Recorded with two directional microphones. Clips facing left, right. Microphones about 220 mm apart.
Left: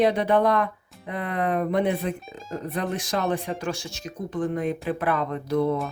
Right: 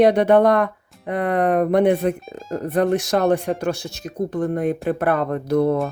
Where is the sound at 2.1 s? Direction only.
Centre (ahead or behind).